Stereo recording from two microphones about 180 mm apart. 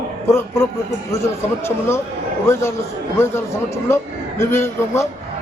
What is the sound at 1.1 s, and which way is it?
A man's voice, 15° left (ahead or behind).